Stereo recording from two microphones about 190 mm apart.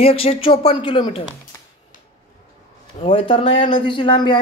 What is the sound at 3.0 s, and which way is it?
Speech, 30° left (ahead or behind).